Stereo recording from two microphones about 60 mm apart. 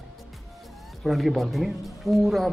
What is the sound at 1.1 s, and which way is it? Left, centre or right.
A man's voice, centre.